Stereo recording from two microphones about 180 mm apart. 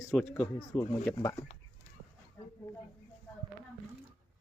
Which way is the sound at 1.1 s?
20° left (ahead or behind).